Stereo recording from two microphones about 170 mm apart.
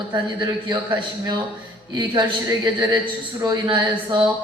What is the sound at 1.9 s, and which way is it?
A woman's voice, 25° right (ahead or behind).